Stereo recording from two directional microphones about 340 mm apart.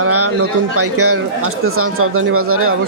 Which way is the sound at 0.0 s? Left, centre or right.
Right.